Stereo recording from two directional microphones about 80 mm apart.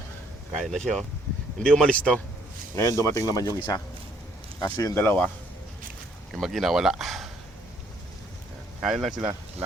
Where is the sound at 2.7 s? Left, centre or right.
Left.